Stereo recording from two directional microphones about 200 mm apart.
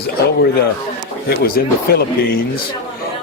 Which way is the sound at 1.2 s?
50° left (ahead or behind).